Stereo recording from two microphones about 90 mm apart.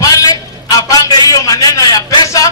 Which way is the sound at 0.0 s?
45° left (ahead or behind).